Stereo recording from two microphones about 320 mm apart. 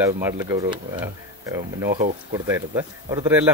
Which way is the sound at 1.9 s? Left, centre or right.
Right.